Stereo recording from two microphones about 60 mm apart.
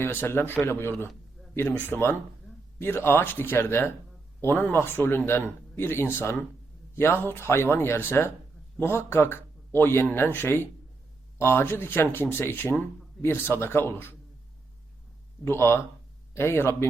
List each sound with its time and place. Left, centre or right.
0.0 s speech: left
15.4 s speech: left